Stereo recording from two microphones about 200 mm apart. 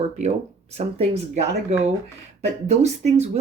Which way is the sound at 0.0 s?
35° right (ahead or behind).